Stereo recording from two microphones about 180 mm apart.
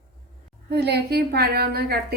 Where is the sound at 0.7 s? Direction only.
65° right (ahead or behind).